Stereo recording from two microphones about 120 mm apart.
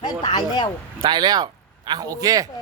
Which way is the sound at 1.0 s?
35° right (ahead or behind).